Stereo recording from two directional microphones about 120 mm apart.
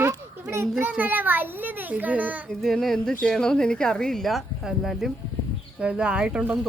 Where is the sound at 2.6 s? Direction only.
Centre (ahead or behind).